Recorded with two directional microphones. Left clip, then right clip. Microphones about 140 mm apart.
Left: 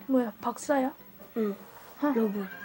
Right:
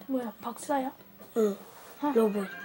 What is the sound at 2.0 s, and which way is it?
Speech, 70° left (ahead or behind).